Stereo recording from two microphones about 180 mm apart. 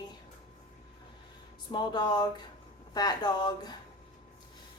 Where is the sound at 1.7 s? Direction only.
25° left (ahead or behind).